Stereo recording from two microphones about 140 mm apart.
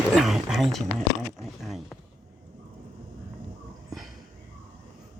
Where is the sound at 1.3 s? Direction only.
Centre (ahead or behind).